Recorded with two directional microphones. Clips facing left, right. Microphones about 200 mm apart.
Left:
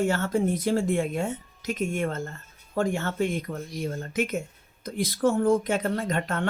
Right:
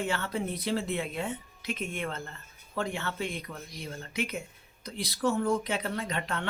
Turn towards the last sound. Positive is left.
turn(degrees=45)  # may be behind; listen again after turning